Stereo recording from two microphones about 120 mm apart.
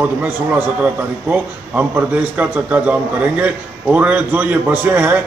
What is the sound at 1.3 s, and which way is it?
A man's voice, 15° right (ahead or behind).